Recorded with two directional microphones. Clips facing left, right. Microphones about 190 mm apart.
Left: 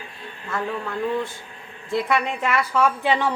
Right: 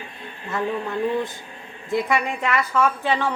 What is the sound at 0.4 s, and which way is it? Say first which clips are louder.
Speech: right 2 dB; 20° right (ahead or behind).